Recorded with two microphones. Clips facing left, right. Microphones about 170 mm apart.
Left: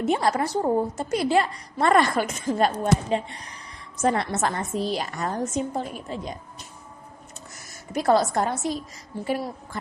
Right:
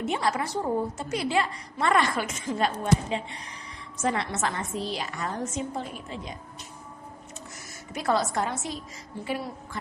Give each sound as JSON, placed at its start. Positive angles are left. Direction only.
{"t": 0.0, "sound": "a woman's voice", "side_deg": 40}
{"t": 7.9, "sound": "a woman's voice", "side_deg": 40}